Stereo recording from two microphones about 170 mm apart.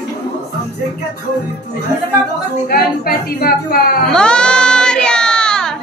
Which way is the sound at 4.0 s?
5° left (ahead or behind).